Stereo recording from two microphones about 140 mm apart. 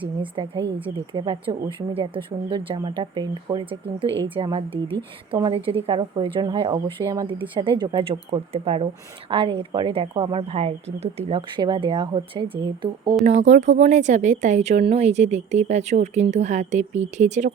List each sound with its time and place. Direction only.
1.1 s a woman's voice: 35° right (ahead or behind)
7.3 s a woman's voice: 35° right (ahead or behind)
11.3 s a woman's voice: 35° right (ahead or behind)
13.2 s a woman's voice: 55° right (ahead or behind)